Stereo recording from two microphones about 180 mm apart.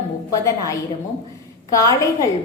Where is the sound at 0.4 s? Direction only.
15° left (ahead or behind).